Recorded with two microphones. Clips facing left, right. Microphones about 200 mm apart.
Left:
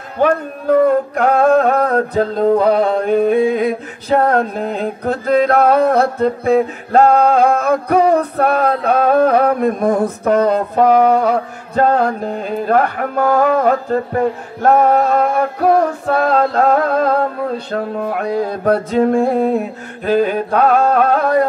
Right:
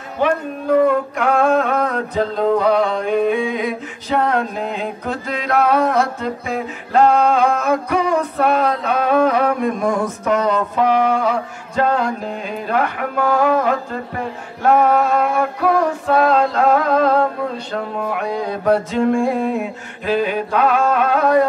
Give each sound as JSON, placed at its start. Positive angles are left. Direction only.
{"t": 0.8, "sound": "singing", "side_deg": 40}
{"t": 5.2, "sound": "music", "side_deg": 55}
{"t": 7.6, "sound": "singing", "side_deg": 35}
{"t": 10.2, "sound": "music", "side_deg": 40}
{"t": 17.6, "sound": "singing", "side_deg": 45}